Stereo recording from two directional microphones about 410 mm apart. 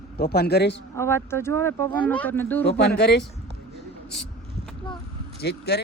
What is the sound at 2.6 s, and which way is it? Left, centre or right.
Speech, left.